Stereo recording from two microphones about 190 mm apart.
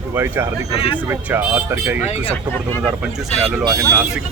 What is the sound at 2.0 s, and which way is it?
Speech, 35° left (ahead or behind).